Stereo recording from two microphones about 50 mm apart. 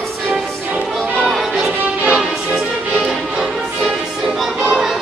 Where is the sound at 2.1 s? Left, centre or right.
Centre.